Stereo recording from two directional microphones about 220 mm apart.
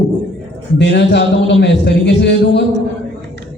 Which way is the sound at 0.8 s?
50° left (ahead or behind).